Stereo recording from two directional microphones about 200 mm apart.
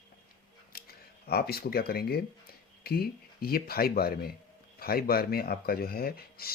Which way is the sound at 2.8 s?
50° left (ahead or behind).